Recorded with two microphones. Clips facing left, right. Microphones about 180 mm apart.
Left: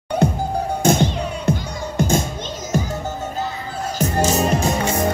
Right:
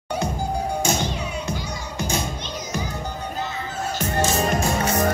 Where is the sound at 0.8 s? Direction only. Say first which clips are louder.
Left 7 dB; 55° left (ahead or behind).